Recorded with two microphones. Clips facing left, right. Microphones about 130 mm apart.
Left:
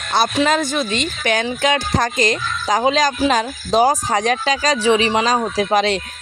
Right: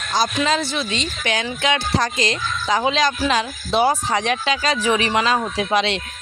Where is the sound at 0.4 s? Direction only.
50° left (ahead or behind).